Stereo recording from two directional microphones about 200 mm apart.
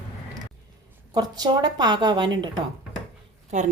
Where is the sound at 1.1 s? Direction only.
20° right (ahead or behind).